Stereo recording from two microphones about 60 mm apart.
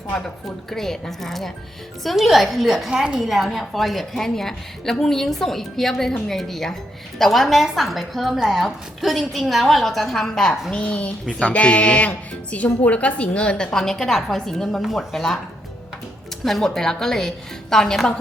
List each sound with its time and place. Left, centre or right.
0.7 s a woman's voice: centre
16.4 s a woman's voice: centre